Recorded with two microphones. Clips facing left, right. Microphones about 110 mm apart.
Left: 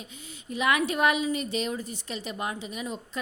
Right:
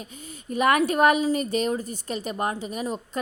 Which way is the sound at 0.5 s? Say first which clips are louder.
Right 5 dB; 50° right (ahead or behind).